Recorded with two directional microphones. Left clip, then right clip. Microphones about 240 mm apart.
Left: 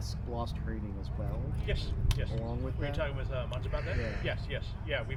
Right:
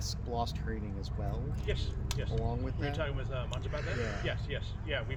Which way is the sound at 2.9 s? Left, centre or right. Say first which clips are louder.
Left 1 dB; centre.